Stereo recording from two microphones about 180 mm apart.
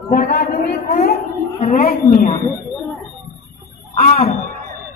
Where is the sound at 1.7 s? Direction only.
55° left (ahead or behind).